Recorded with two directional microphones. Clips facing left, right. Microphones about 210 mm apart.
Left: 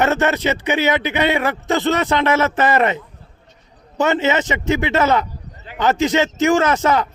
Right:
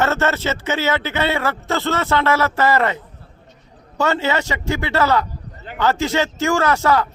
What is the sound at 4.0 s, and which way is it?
Speech, 20° left (ahead or behind).